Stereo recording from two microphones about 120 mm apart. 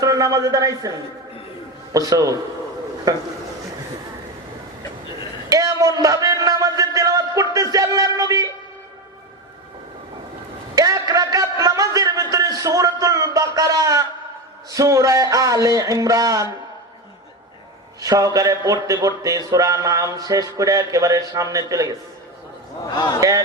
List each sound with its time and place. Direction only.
0.0 s a man's voice: 30° right (ahead or behind)
5.5 s a sound: 30° right (ahead or behind)
10.8 s a sound: 30° right (ahead or behind)
14.7 s a man's voice: 25° right (ahead or behind)
18.0 s a man's voice: 30° right (ahead or behind)
23.2 s a man's voice: 25° right (ahead or behind)